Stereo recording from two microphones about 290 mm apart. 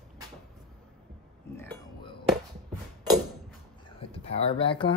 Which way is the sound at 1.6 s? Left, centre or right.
Centre.